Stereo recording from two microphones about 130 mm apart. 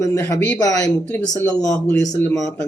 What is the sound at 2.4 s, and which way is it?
Speech, 25° left (ahead or behind).